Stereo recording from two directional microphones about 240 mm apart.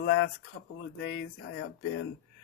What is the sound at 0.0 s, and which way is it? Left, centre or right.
Speech, left.